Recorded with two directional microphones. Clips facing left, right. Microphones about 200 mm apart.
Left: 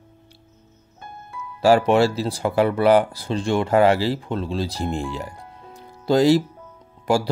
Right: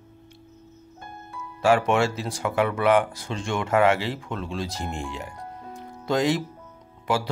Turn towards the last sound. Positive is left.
turn(degrees=40)  # may be behind; listen again after turning